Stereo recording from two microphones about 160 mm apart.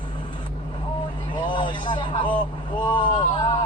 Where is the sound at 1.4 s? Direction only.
30° left (ahead or behind).